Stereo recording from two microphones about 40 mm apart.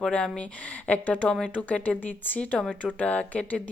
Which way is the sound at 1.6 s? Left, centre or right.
Left.